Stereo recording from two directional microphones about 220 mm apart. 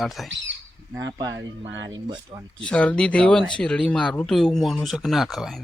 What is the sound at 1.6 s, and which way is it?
Speech, 55° right (ahead or behind).